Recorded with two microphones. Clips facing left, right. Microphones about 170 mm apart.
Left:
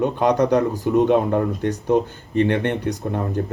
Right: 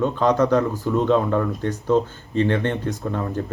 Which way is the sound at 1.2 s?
30° left (ahead or behind).